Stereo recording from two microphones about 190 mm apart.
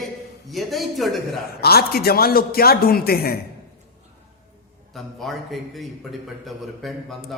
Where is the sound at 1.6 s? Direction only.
55° left (ahead or behind).